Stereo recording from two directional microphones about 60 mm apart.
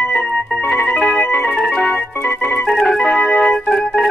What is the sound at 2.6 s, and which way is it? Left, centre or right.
Organ, centre.